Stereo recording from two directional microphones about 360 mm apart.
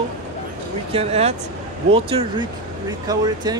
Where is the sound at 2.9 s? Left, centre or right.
Centre.